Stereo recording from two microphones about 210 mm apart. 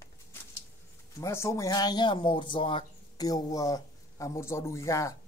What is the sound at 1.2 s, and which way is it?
A man's voice, 15° left (ahead or behind).